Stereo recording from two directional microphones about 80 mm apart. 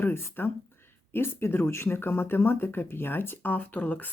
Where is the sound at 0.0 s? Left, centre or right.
Left.